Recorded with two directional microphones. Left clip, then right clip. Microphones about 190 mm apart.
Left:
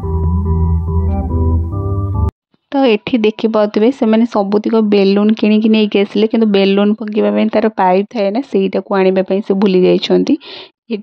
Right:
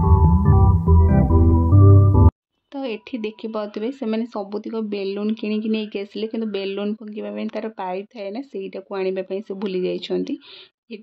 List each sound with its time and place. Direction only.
2.7 s speech: 45° left (ahead or behind)